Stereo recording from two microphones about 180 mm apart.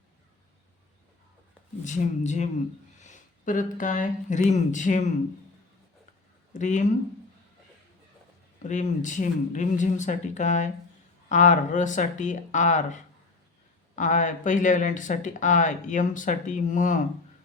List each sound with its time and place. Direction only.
1.8 s speech: 40° left (ahead or behind)
6.5 s speech: 40° left (ahead or behind)
8.6 s speech: 45° left (ahead or behind)